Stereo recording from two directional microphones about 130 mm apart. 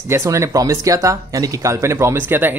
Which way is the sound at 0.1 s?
25° right (ahead or behind).